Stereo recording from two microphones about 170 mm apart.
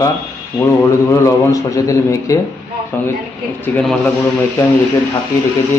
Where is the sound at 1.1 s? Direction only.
15° left (ahead or behind).